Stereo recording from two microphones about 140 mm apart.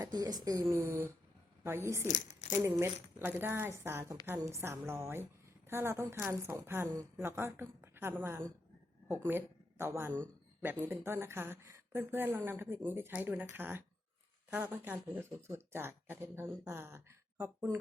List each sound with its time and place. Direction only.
0.0 s speech: 25° right (ahead or behind)
2.0 s speech: 60° left (ahead or behind)
2.5 s a woman's voice: 15° right (ahead or behind)